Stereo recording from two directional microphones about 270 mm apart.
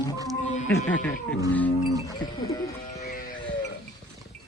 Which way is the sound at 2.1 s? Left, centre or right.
Centre.